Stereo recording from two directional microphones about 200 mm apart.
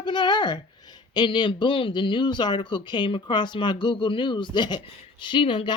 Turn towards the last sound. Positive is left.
turn(degrees=25)  # may be behind; listen again after turning